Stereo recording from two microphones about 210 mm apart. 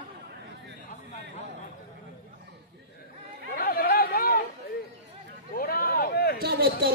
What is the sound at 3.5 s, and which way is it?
Chatter, 45° left (ahead or behind).